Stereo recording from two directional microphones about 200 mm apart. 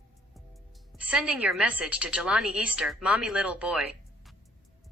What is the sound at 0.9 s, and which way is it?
A woman's voice, 5° right (ahead or behind).